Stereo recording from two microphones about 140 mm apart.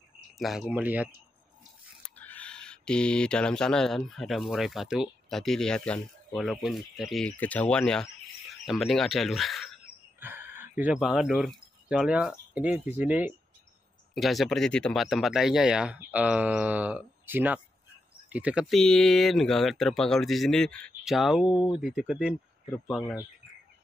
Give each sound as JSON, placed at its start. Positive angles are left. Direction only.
{"t": 0.4, "sound": "speech", "side_deg": 0}
{"t": 2.0, "sound": "speech", "side_deg": 10}
{"t": 10.2, "sound": "speech", "side_deg": -15}
{"t": 14.1, "sound": "speech", "side_deg": 0}
{"t": 21.5, "sound": "speech", "side_deg": 35}
{"t": 21.7, "sound": "speech", "side_deg": -5}